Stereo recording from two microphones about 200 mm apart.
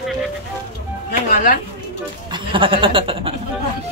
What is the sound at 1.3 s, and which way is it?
Speech, 40° left (ahead or behind).